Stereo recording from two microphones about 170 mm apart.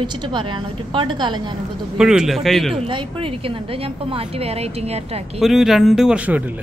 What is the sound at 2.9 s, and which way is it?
A woman's voice, 30° right (ahead or behind).